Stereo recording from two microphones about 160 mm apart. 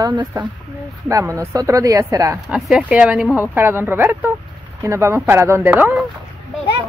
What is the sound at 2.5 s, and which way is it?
Speech, 5° right (ahead or behind).